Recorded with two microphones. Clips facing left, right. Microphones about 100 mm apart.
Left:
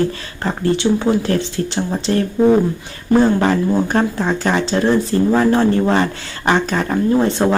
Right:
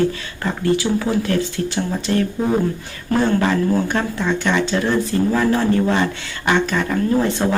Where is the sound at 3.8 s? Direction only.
35° left (ahead or behind).